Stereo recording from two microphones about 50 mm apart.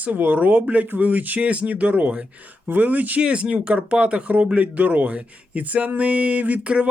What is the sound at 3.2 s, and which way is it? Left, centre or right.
Speech, right.